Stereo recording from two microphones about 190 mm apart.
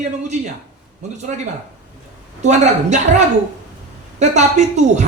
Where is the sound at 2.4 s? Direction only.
40° right (ahead or behind).